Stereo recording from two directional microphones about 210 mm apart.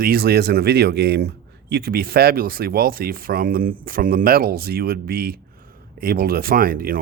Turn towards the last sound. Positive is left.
turn(degrees=-45)  # may be behind; listen again after turning